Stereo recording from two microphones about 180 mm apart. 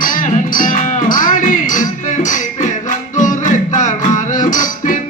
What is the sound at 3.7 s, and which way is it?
Music, 45° left (ahead or behind).